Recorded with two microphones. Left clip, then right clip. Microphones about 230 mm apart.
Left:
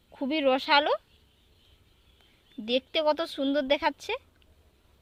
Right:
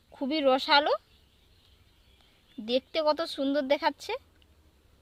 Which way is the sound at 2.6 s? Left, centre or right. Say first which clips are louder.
Left 1 dB; centre.